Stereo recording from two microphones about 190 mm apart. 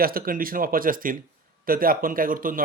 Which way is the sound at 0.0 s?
50° right (ahead or behind).